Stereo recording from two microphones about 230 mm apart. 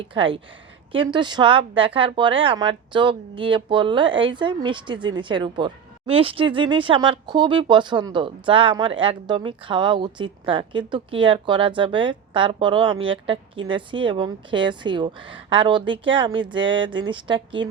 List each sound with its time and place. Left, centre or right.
0.1 s speech: right